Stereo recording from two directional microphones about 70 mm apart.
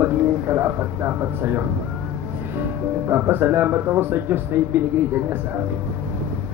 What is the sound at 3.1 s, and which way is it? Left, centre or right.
Speech, right.